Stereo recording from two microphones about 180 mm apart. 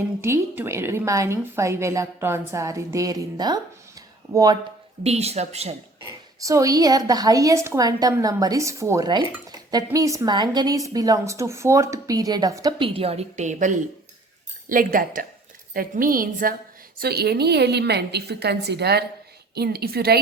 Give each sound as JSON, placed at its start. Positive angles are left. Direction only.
{"t": 0.2, "sound": "a woman's voice", "side_deg": -15}
{"t": 5.0, "sound": "a woman's voice", "side_deg": -35}
{"t": 6.4, "sound": "a woman's voice", "side_deg": -20}
{"t": 12.9, "sound": "a woman's voice", "side_deg": -35}